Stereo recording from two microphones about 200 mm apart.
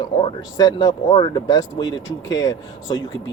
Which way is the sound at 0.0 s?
25° left (ahead or behind).